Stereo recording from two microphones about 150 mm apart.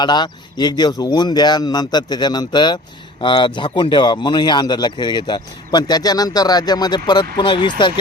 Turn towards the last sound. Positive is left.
turn(degrees=30)  # may be behind; listen again after turning